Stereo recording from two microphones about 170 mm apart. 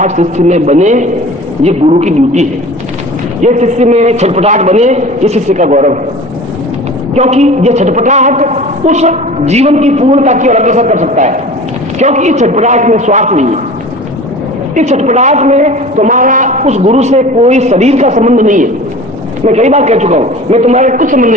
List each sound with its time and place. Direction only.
0.0 s a man's voice: 45° right (ahead or behind)
7.1 s a man's voice: 40° right (ahead or behind)
14.8 s a man's voice: 45° right (ahead or behind)